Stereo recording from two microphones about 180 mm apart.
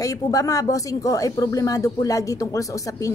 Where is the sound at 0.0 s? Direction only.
20° left (ahead or behind).